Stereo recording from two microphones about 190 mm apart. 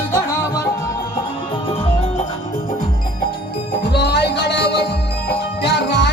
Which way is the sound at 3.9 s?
60° left (ahead or behind).